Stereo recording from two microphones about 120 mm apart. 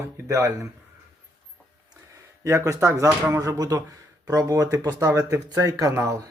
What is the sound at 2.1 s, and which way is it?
Speech, 25° right (ahead or behind).